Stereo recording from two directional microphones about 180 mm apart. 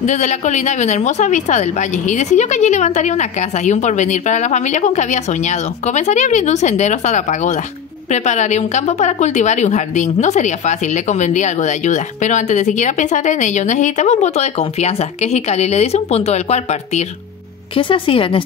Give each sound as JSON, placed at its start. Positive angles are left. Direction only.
{"t": 0.0, "sound": "a woman's voice", "side_deg": 40}